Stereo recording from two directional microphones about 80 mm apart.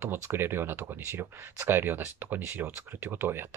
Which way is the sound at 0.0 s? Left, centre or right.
Right.